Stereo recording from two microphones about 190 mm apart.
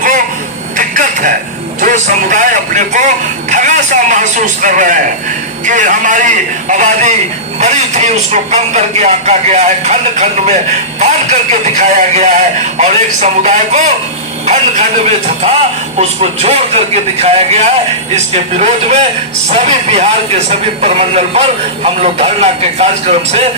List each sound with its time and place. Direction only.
0.8 s a sound: 45° right (ahead or behind)
1.8 s a man's voice: 40° right (ahead or behind)
16.0 s a man's voice: 35° right (ahead or behind)